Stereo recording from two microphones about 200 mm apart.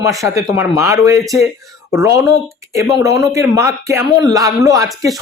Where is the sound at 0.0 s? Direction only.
15° right (ahead or behind).